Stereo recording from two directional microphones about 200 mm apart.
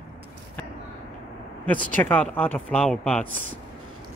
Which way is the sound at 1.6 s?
5° left (ahead or behind).